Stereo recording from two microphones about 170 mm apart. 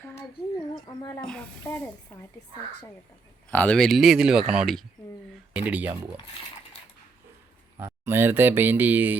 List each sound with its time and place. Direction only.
0.9 s speech: 25° left (ahead or behind)
1.2 s speech: 5° left (ahead or behind)
1.6 s speech: 15° left (ahead or behind)
3.5 s speech: 5° left (ahead or behind); by 6.1 s 10° right (ahead or behind)
7.8 s speech: 15° right (ahead or behind)